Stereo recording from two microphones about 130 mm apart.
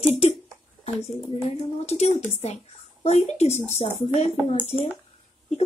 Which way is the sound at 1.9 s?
55° left (ahead or behind).